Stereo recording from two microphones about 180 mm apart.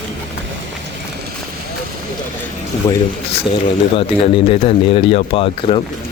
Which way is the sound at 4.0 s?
30° left (ahead or behind).